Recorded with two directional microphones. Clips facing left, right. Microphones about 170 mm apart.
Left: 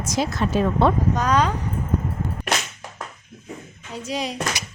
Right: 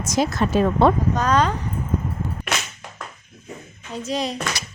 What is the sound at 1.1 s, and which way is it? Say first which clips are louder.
Speech: right 1 dB; 10° left (ahead or behind).